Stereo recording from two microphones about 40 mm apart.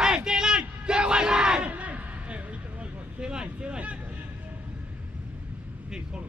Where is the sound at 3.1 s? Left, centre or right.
Right.